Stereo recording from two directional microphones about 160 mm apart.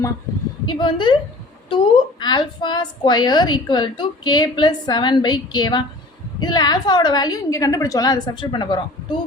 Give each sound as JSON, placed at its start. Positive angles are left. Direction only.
{"t": 0.7, "sound": "a woman's voice", "side_deg": 30}